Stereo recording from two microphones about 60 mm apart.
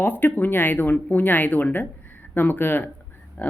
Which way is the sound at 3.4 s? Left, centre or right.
Left.